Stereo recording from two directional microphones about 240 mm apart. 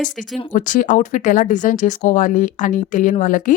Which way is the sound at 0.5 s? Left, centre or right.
Left.